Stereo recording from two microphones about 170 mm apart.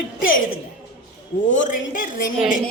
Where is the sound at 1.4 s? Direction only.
50° left (ahead or behind).